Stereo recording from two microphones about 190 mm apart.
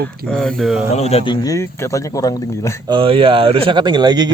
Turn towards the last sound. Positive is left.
turn(degrees=-20)  # may be behind; listen again after turning